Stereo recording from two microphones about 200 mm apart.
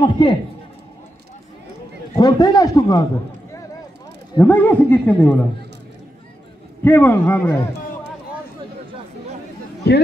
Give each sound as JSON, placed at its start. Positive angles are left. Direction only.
{"t": 0.0, "sound": "a man's voice", "side_deg": 25}
{"t": 2.1, "sound": "a man's voice", "side_deg": 20}
{"t": 4.4, "sound": "a man's voice", "side_deg": 10}
{"t": 6.8, "sound": "a man's voice", "side_deg": 10}